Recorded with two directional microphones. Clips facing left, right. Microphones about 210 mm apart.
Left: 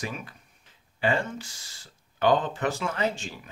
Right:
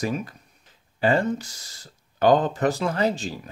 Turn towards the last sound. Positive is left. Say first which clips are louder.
# right 5 dB
turn(degrees=-35)  # may be behind; listen again after turning